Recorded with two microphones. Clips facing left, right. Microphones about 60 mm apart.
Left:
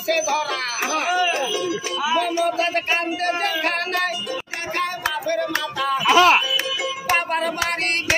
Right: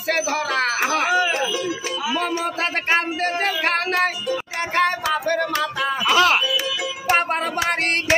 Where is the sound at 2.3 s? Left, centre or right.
Right.